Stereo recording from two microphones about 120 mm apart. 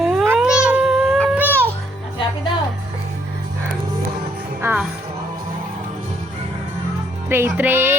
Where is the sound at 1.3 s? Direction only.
15° right (ahead or behind).